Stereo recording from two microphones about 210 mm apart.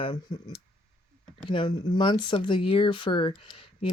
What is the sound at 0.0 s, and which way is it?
Speech, 20° left (ahead or behind).